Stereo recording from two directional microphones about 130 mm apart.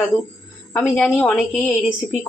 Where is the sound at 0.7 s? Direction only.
Centre (ahead or behind).